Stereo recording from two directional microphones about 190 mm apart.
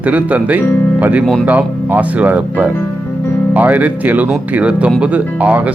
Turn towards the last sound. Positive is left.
turn(degrees=-10)  # may be behind; listen again after turning